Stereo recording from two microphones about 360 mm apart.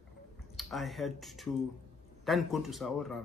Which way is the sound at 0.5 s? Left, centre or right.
Centre.